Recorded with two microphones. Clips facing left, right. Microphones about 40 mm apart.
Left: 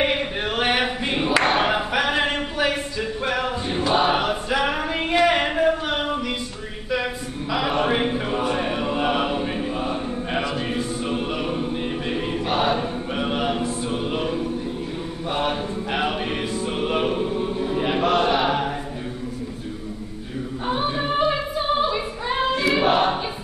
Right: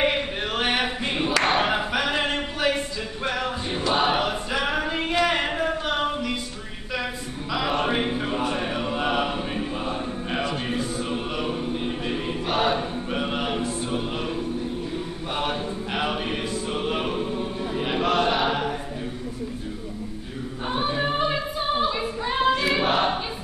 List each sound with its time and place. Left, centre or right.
0.0 s a sound: centre
3.3 s a capella: centre
7.5 s chant: centre
8.5 s choir: centre
15.3 s music: centre
20.6 s music: centre
22.8 s choir: centre